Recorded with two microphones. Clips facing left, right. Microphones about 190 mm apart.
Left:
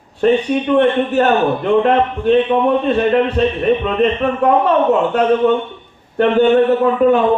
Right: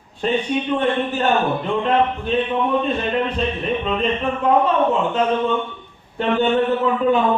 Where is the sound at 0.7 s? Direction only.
70° left (ahead or behind).